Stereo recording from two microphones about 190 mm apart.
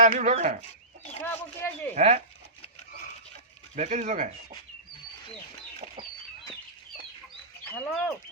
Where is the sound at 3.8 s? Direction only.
35° right (ahead or behind).